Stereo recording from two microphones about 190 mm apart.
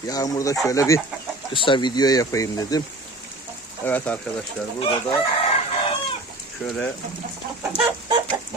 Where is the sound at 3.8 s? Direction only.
10° left (ahead or behind).